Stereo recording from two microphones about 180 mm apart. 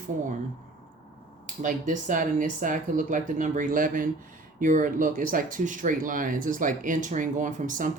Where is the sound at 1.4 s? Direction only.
45° right (ahead or behind).